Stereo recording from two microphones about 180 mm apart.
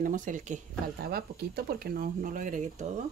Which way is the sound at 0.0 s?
45° right (ahead or behind).